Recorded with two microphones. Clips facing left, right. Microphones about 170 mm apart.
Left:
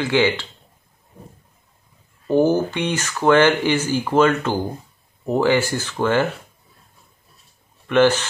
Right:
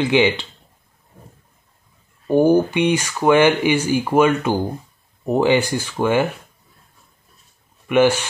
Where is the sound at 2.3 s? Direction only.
15° right (ahead or behind).